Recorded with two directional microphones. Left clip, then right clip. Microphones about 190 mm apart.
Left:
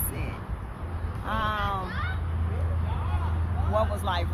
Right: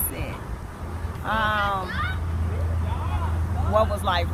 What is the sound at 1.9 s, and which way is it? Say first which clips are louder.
Fowl: right 5 dB; 50° right (ahead or behind).